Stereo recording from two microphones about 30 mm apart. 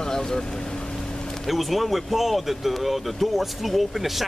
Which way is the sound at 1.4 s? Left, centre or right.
Centre.